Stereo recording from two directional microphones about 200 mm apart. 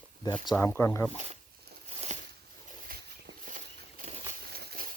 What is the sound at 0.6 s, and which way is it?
Speech, 10° left (ahead or behind).